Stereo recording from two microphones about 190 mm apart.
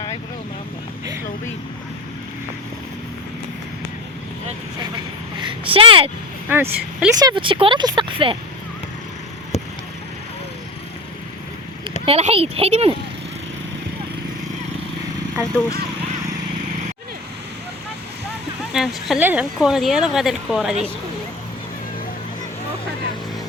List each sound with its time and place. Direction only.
5.5 s speech: 30° right (ahead or behind)
6.5 s speech: 10° right (ahead or behind); by 8.4 s 25° right (ahead or behind)
9.5 s vehicle: 35° left (ahead or behind)
12.0 s a child's voice: 30° right (ahead or behind)
18.7 s a woman's voice: centre (ahead or behind)